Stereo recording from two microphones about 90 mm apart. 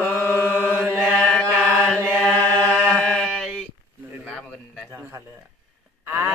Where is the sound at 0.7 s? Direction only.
20° right (ahead or behind).